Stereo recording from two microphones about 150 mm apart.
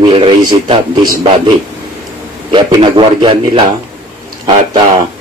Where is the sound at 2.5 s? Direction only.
30° right (ahead or behind).